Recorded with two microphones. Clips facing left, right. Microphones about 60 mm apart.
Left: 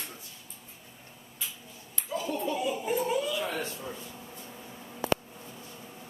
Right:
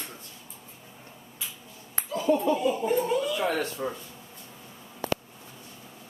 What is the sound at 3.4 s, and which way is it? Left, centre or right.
Speech, right.